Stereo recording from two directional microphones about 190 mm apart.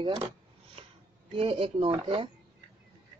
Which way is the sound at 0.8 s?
30° right (ahead or behind).